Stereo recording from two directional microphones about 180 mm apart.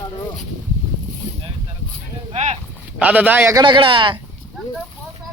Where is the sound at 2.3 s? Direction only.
40° right (ahead or behind).